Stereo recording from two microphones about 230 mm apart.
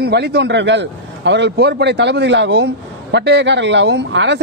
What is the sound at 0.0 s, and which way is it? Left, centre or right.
A man's voice, right.